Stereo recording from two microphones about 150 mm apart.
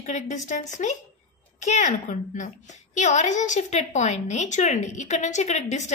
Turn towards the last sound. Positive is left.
turn(degrees=50)  # may be behind; listen again after turning